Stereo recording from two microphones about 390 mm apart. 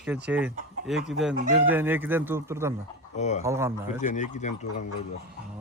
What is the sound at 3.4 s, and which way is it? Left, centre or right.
Speech, centre.